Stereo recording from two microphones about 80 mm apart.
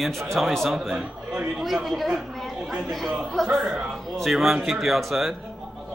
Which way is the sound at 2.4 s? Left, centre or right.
Centre.